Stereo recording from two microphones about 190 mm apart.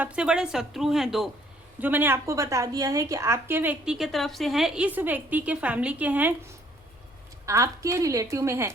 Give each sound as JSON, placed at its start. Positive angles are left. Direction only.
{"t": 0.0, "sound": "a woman's voice", "side_deg": -5}
{"t": 7.4, "sound": "a woman's voice", "side_deg": -15}